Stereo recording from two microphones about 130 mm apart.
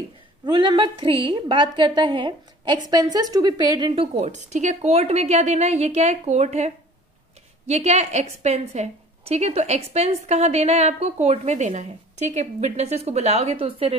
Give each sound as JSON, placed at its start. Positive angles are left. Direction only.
{"t": 0.5, "sound": "a woman's voice", "side_deg": -40}
{"t": 4.2, "sound": "a woman's voice", "side_deg": -65}